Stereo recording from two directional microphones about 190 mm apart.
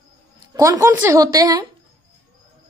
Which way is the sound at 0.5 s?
15° right (ahead or behind).